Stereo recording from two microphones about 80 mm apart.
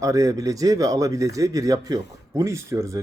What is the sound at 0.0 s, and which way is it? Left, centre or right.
A man's voice, right.